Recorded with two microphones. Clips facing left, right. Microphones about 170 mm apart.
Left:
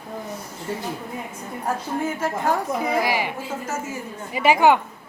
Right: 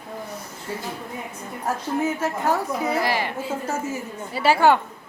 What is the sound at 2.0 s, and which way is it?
Speech, 10° right (ahead or behind).